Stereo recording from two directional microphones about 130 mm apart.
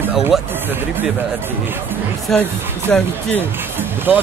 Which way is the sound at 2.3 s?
5° left (ahead or behind).